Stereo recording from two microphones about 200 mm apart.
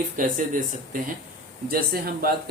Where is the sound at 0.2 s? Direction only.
40° right (ahead or behind).